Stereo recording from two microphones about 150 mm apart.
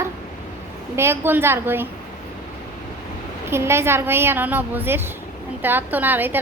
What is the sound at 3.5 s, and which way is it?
A woman's voice, 15° right (ahead or behind).